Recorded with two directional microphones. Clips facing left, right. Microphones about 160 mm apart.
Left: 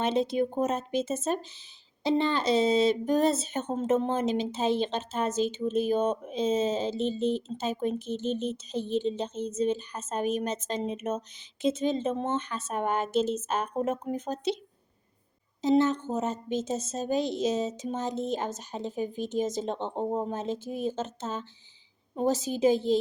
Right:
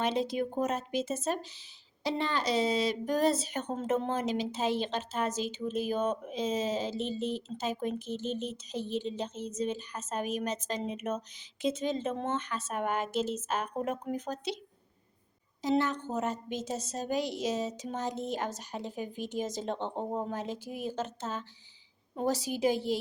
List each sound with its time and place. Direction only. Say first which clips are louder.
0.0 s speech: left 4 dB; 25° left (ahead or behind)
15.6 s a woman's voice: left 5 dB; 20° left (ahead or behind)